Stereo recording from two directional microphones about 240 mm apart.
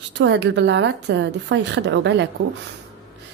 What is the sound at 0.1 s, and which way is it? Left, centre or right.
A woman's voice, right.